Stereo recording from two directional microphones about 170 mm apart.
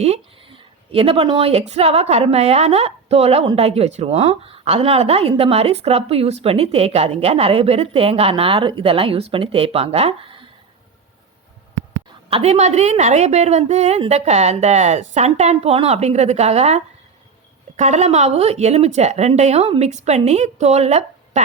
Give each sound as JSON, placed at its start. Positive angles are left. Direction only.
{"t": 0.0, "sound": "speech", "side_deg": -35}
{"t": 12.3, "sound": "speech", "side_deg": -40}